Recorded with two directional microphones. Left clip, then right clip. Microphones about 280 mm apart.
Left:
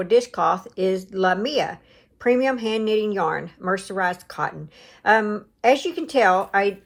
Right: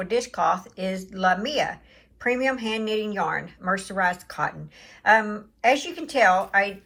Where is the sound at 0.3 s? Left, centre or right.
Left.